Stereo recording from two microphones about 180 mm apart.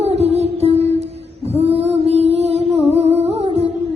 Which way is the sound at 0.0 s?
35° right (ahead or behind).